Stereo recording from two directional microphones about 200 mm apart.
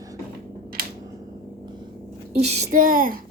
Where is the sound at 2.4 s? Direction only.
35° right (ahead or behind).